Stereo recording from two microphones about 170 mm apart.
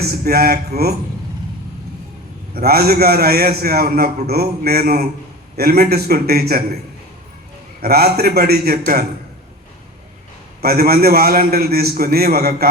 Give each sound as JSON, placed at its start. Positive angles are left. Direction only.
{"t": 0.0, "sound": "speech", "side_deg": -65}
{"t": 2.5, "sound": "a man's voice", "side_deg": -65}
{"t": 7.8, "sound": "a man's voice", "side_deg": -65}
{"t": 10.6, "sound": "a man's voice", "side_deg": -65}